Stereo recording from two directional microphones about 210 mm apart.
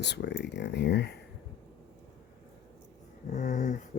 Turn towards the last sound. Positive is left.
turn(degrees=35)  # may be behind; listen again after turning